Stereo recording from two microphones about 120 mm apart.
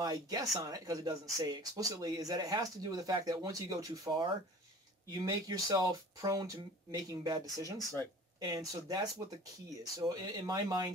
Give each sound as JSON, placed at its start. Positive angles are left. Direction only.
{"t": 0.0, "sound": "speech", "side_deg": -30}